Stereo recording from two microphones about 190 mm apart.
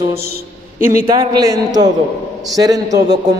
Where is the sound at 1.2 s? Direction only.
20° right (ahead or behind).